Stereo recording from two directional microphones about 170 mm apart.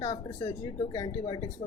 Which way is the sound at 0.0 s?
25° left (ahead or behind).